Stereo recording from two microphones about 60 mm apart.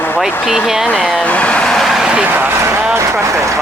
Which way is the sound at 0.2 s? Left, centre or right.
Centre.